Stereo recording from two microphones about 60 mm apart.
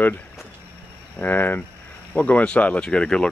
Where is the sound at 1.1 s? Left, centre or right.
Left; by 3.3 s centre.